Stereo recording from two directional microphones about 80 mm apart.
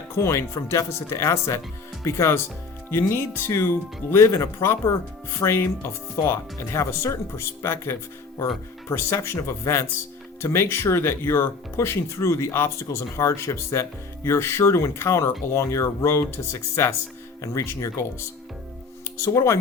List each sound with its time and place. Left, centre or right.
0.2 s speech: left
19.2 s speech: left